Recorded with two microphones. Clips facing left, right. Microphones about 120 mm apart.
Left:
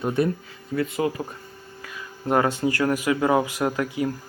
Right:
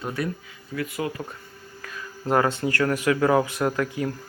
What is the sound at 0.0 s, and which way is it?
Speech, 25° left (ahead or behind).